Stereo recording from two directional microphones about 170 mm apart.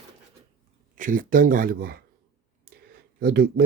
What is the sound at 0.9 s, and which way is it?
Speech, 55° right (ahead or behind).